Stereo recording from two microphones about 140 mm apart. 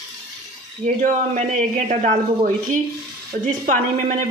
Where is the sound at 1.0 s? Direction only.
60° right (ahead or behind).